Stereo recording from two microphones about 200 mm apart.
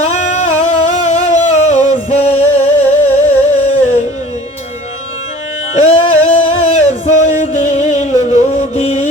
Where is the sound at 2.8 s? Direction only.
10° left (ahead or behind).